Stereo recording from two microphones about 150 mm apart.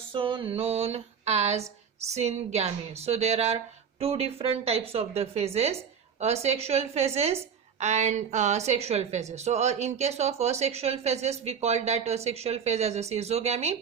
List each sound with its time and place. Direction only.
0.1 s a woman's voice: 35° right (ahead or behind)